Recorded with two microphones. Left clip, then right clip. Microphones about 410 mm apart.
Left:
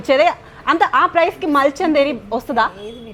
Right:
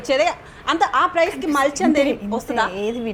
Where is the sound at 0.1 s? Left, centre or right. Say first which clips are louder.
Left 5 dB; left.